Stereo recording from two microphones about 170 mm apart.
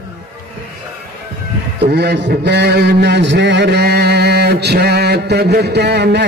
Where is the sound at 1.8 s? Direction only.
75° right (ahead or behind).